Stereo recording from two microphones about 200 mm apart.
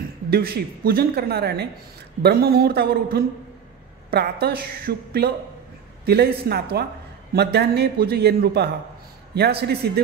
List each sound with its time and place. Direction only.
0.3 s speech: 50° right (ahead or behind)